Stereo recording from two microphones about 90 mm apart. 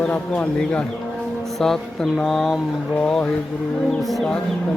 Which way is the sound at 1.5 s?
5° left (ahead or behind).